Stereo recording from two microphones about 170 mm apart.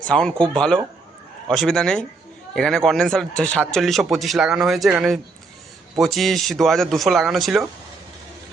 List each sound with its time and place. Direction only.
0.1 s a man's voice: 5° left (ahead or behind)